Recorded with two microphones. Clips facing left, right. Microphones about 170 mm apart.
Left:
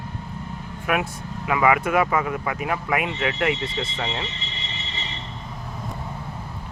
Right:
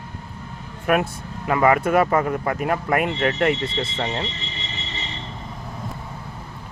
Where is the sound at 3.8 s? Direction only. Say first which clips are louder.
Right 3 dB; 30° right (ahead or behind).